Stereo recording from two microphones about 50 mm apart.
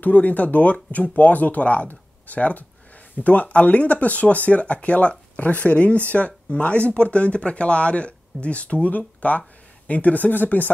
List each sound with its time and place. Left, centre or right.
0.0 s speech: left